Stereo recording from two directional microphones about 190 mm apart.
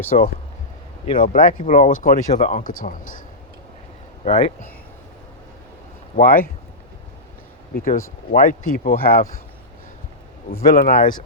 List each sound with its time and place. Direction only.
0.1 s speech: 40° left (ahead or behind)
6.1 s speech: 50° left (ahead or behind)
8.3 s speech: 45° left (ahead or behind)
10.5 s speech: 50° left (ahead or behind)